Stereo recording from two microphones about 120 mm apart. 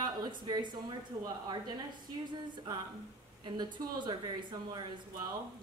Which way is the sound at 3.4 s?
40° right (ahead or behind).